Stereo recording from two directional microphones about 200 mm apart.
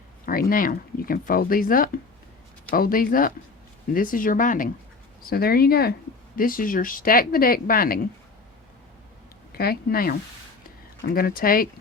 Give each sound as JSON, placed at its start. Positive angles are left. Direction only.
{"t": 0.3, "sound": "speech", "side_deg": 45}
{"t": 9.5, "sound": "speech", "side_deg": 50}